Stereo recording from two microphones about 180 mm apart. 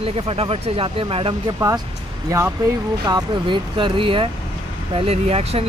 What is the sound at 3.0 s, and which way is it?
Speech, 25° right (ahead or behind).